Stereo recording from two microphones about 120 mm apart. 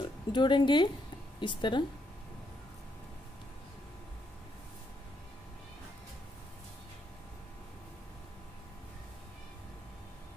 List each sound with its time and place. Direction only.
0.0 s speech: 40° left (ahead or behind)